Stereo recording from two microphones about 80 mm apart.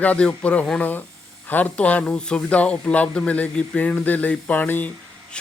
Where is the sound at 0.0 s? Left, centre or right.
Centre.